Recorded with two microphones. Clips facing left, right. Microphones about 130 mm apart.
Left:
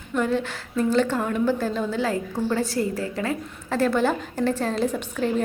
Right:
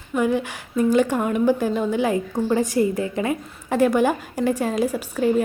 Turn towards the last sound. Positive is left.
turn(degrees=-10)  # may be behind; listen again after turning